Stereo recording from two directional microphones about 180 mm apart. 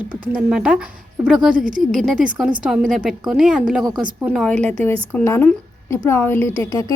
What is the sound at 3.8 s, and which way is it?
Speech, 25° right (ahead or behind).